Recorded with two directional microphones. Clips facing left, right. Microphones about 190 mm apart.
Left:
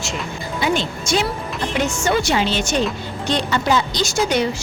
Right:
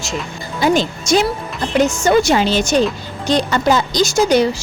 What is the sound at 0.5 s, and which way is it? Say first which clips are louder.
Speech: right 6 dB; 40° right (ahead or behind).